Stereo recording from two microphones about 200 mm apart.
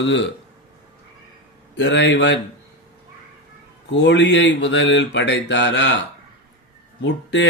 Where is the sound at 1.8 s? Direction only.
60° left (ahead or behind).